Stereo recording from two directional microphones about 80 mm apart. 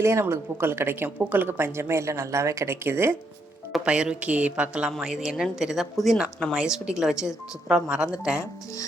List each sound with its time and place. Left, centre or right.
0.0 s speech: right
3.8 s a woman's voice: centre